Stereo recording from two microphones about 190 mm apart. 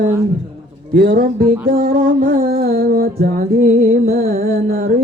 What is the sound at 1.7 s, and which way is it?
Music, 50° right (ahead or behind).